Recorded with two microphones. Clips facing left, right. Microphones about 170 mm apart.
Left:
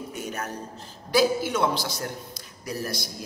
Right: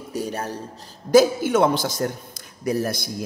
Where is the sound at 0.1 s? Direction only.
35° right (ahead or behind).